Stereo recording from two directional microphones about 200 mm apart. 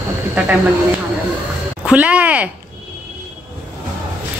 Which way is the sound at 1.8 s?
5° right (ahead or behind).